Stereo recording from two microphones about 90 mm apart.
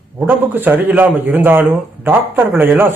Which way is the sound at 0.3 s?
20° right (ahead or behind).